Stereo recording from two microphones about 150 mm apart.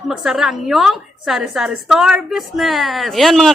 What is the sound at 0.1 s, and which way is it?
A woman's voice, centre (ahead or behind).